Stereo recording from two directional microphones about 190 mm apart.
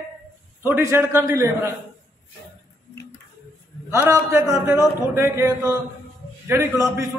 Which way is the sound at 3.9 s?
15° right (ahead or behind).